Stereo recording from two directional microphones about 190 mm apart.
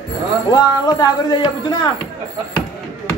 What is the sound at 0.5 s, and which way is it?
Speech, 20° left (ahead or behind).